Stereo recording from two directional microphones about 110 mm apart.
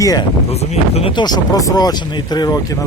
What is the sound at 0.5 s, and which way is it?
Speech, 75° left (ahead or behind).